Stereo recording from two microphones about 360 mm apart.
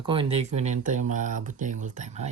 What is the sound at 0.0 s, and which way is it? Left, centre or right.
Speech, centre.